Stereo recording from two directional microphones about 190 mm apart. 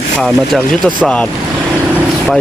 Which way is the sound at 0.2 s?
Centre (ahead or behind).